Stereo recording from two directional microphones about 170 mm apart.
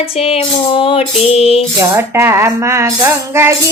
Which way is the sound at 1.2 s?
35° left (ahead or behind).